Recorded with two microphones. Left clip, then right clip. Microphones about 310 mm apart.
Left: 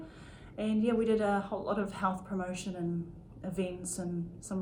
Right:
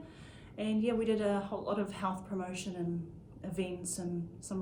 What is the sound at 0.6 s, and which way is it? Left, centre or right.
Speech, centre.